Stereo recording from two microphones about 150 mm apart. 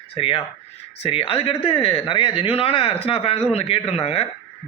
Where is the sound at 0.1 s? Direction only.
40° left (ahead or behind).